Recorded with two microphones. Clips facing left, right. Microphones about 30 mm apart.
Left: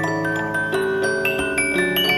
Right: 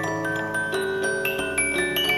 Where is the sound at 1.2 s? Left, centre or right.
Left.